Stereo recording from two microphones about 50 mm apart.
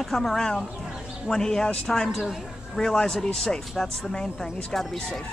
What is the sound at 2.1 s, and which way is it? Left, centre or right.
Speech, centre.